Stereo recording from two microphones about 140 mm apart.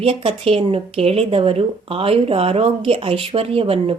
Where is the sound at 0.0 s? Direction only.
40° right (ahead or behind).